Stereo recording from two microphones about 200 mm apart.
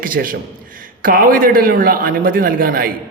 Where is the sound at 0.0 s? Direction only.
45° right (ahead or behind).